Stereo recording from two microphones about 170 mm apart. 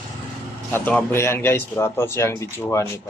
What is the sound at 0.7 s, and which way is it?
A man's voice, 10° left (ahead or behind).